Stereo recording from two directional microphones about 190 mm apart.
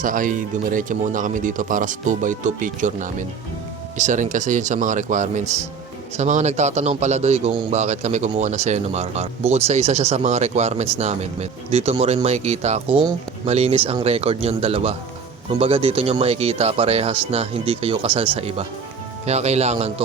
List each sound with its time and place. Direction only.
0.0 s a man's voice: 45° right (ahead or behind)